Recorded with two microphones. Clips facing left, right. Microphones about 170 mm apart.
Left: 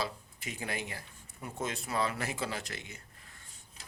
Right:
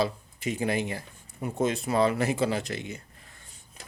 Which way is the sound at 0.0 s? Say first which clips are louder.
Right 9 dB; 20° right (ahead or behind).